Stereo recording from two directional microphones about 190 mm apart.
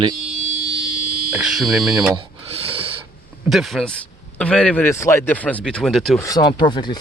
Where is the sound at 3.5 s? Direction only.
Centre (ahead or behind).